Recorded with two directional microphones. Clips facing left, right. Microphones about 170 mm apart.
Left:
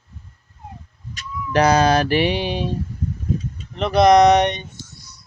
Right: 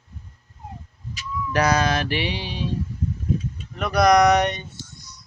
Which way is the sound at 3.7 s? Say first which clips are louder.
Left 4 dB; 25° left (ahead or behind).